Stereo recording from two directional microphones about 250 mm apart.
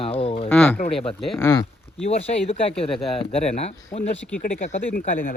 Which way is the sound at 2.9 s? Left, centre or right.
Centre.